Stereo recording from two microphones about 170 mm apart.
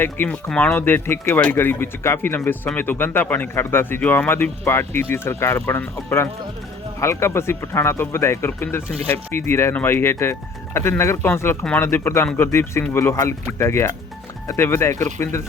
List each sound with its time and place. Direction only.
0.0 s speech: 10° left (ahead or behind)